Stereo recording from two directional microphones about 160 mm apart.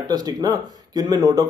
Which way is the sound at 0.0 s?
25° right (ahead or behind).